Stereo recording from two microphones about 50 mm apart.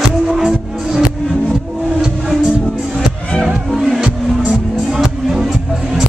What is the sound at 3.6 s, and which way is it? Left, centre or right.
Music, centre.